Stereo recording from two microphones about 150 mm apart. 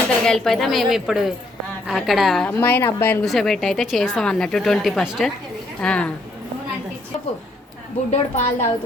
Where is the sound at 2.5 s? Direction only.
15° left (ahead or behind).